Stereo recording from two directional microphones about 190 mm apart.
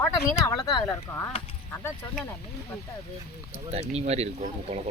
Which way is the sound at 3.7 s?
35° right (ahead or behind).